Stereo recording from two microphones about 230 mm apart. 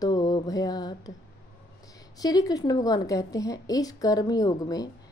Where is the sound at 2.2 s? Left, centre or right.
Centre.